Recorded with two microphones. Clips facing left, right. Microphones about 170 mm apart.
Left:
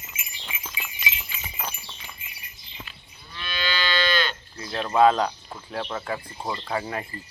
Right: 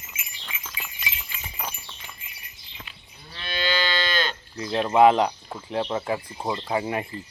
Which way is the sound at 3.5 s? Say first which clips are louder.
Right 2 dB; 40° right (ahead or behind).